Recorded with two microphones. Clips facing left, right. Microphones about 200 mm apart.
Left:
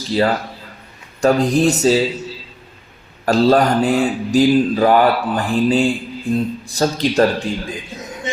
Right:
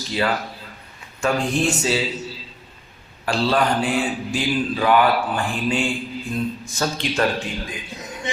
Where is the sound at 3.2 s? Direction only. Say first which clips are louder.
Left 7 dB; 40° left (ahead or behind).